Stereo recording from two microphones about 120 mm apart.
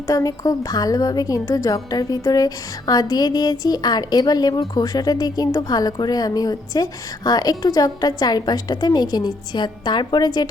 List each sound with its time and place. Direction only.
0.1 s a woman's voice: 30° left (ahead or behind)